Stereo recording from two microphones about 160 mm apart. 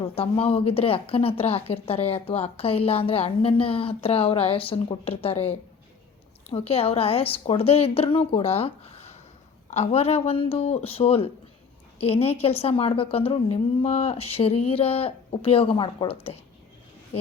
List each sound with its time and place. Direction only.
0.0 s speech: 35° left (ahead or behind)